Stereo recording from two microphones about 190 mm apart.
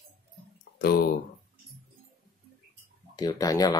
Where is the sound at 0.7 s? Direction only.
50° left (ahead or behind).